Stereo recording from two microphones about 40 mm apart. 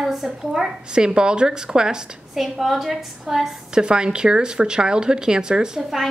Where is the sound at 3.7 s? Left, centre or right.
Right.